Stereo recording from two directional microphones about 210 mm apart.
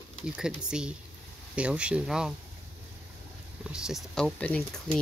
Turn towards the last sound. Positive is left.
turn(degrees=5)  # may be behind; listen again after turning